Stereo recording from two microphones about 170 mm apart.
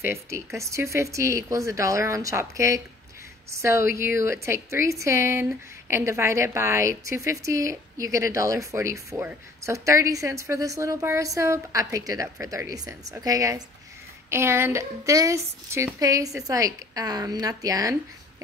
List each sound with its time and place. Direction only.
0.0 s a woman's voice: 15° right (ahead or behind)